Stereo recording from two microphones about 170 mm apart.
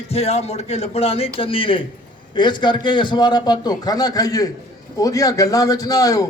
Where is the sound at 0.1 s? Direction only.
35° left (ahead or behind).